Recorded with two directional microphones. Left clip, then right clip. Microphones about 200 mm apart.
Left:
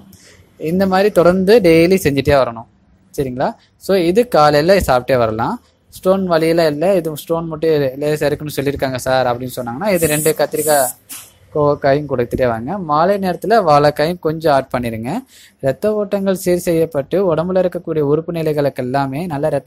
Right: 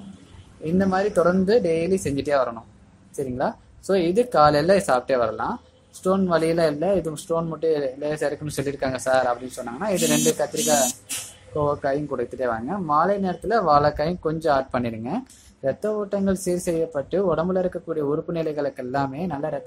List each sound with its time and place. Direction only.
0.7 s speech: 35° left (ahead or behind)